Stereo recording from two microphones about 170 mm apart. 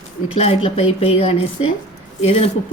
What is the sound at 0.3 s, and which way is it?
A woman's voice, 35° left (ahead or behind).